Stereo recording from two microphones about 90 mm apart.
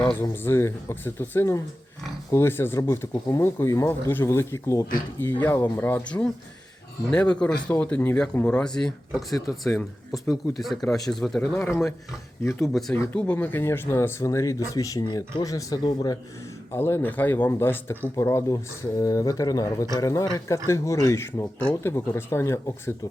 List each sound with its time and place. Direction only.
0.2 s speech: 30° left (ahead or behind)
3.1 s speech: 40° left (ahead or behind)
3.4 s speech: 30° left (ahead or behind)
5.3 s speech: 25° left (ahead or behind)
7.1 s speech: 10° left (ahead or behind)
11.4 s speech: 25° left (ahead or behind)
15.0 s speech: 50° left (ahead or behind)
15.8 s speech: 55° left (ahead or behind)
16.7 s speech: 25° left (ahead or behind)